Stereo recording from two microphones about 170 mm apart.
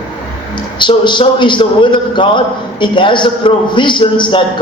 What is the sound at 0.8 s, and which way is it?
A man's voice, 30° left (ahead or behind).